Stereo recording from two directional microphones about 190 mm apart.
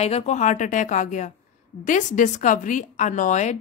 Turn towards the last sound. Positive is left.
turn(degrees=40)  # may be behind; listen again after turning